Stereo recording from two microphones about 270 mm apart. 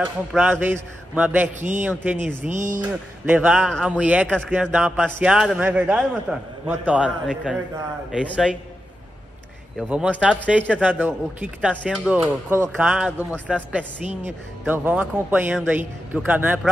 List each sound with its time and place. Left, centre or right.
0.0 s speech: centre
2.5 s speech: right
3.3 s speech: centre
9.8 s speech: centre